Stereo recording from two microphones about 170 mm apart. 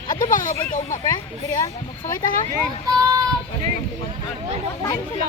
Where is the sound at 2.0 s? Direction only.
50° left (ahead or behind).